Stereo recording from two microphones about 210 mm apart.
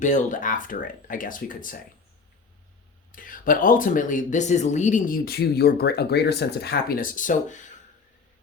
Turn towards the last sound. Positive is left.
turn(degrees=35)  # may be behind; listen again after turning